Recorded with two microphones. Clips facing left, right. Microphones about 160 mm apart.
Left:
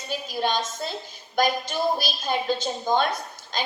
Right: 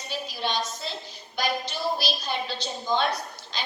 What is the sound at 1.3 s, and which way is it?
A woman's voice, 50° left (ahead or behind).